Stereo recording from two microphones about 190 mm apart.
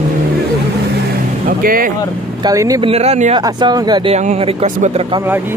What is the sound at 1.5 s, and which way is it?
Speech, 50° right (ahead or behind).